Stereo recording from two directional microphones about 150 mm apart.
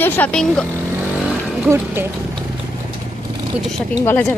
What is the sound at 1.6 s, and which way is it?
Speech, 15° right (ahead or behind).